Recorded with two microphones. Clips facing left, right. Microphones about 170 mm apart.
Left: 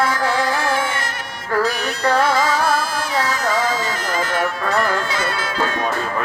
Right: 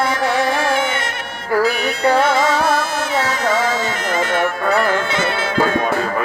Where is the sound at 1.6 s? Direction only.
10° right (ahead or behind).